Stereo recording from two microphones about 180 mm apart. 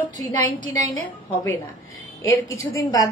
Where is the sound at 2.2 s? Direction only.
15° left (ahead or behind).